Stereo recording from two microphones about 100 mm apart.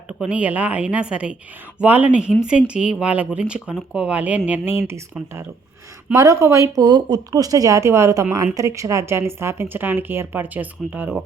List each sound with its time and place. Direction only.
0.1 s a woman's voice: 10° right (ahead or behind)